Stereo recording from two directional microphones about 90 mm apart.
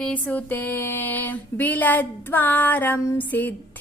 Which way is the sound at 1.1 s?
20° left (ahead or behind).